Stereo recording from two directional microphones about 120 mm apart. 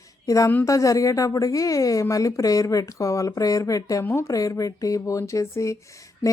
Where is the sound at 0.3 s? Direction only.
25° left (ahead or behind).